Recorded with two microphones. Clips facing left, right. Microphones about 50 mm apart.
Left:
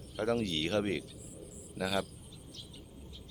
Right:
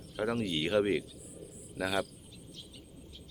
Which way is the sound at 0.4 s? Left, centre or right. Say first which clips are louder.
Right 3 dB; centre.